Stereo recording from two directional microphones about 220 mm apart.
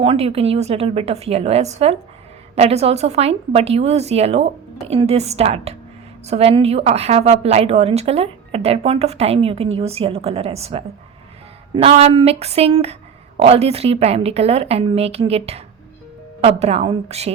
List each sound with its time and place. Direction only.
0.0 s speech: 25° right (ahead or behind)